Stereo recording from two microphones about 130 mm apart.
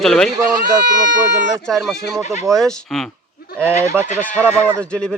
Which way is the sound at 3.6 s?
20° right (ahead or behind).